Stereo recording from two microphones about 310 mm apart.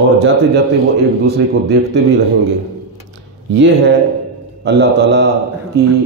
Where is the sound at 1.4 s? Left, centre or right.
Right.